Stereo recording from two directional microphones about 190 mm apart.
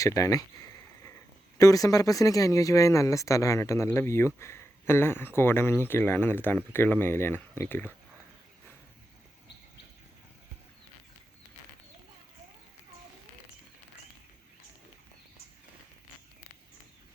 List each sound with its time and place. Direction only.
0.0 s speech: 15° left (ahead or behind)
1.5 s speech: 20° left (ahead or behind)